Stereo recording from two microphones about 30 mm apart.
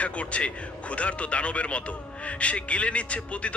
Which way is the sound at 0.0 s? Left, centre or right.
Left.